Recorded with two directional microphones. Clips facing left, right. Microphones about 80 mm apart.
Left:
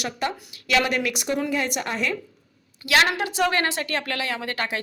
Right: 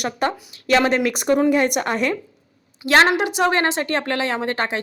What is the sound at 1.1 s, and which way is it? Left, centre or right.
Speech, right.